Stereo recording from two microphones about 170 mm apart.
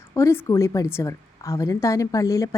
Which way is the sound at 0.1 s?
20° left (ahead or behind).